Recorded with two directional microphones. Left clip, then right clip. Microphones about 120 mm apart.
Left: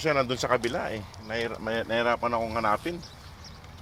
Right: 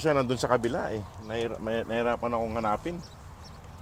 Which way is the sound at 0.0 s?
65° right (ahead or behind).